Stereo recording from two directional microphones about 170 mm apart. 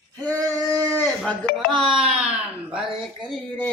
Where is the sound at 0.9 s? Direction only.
15° left (ahead or behind).